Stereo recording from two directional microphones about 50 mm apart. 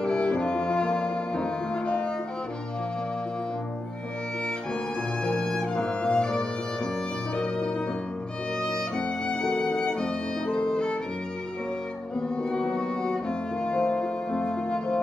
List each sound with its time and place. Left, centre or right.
0.0 s music: centre
5.2 s music: centre
12.2 s music: centre